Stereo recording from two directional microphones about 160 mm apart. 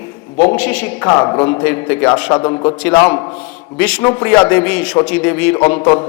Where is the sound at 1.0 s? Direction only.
20° left (ahead or behind).